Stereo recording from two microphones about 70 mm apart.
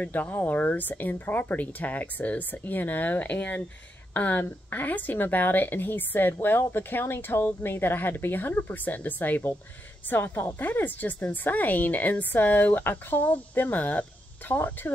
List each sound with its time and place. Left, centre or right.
0.0 s a woman's voice: left